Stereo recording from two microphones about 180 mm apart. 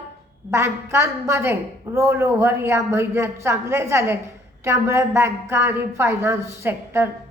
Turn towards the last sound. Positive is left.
turn(degrees=-15)  # may be behind; listen again after turning